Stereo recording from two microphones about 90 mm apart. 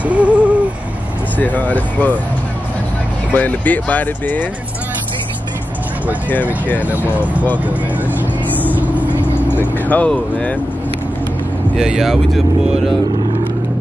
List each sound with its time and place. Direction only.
0.0 s hoot: 15° right (ahead or behind)
1.4 s speech: 20° left (ahead or behind)
3.3 s speech: 20° left (ahead or behind)
6.9 s speech: 15° right (ahead or behind)
8.6 s vehicle: 20° right (ahead or behind)
9.1 s vehicle: 20° left (ahead or behind)
11.7 s speech: 5° right (ahead or behind)